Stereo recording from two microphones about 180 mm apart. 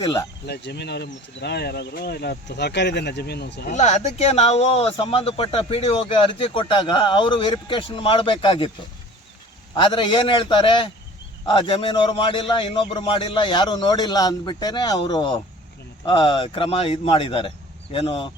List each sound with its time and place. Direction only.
0.4 s speech: 65° left (ahead or behind)
3.7 s speech: 40° left (ahead or behind)
9.7 s speech: 25° left (ahead or behind)